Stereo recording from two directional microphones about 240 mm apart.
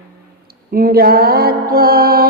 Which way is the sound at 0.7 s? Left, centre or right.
Right.